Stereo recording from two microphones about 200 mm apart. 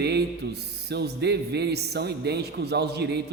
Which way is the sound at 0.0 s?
55° right (ahead or behind).